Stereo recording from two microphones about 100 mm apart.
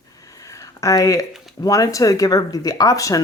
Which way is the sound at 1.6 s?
35° left (ahead or behind).